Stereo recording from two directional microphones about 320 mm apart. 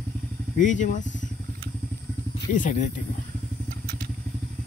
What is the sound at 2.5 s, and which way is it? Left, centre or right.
Speech, left.